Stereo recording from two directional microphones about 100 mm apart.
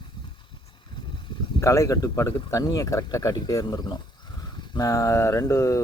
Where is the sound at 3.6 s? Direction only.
50° left (ahead or behind).